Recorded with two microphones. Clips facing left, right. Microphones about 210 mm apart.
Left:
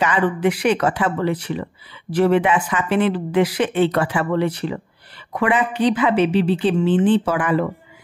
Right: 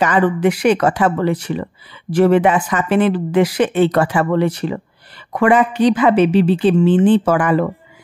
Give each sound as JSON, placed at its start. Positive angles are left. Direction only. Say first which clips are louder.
{"t": 0.0, "sound": "speech", "louder": "right 4 dB", "side_deg": -45}